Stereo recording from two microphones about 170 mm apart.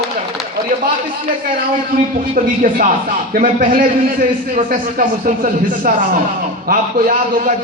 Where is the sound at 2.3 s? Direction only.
55° right (ahead or behind).